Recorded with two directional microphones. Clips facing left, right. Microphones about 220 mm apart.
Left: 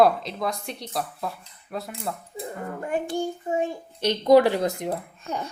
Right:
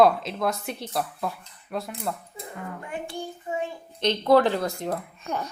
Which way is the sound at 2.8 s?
40° left (ahead or behind).